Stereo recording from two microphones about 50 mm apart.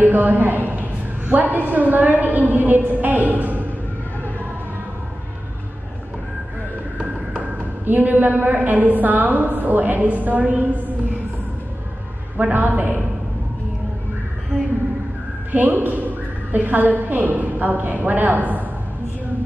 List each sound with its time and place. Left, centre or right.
0.0 s a woman's voice: right
7.8 s a woman's voice: right
12.4 s a woman's voice: right
15.5 s a woman's voice: right